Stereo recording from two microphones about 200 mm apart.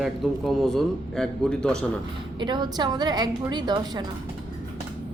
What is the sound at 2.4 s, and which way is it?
A woman's voice, 20° right (ahead or behind).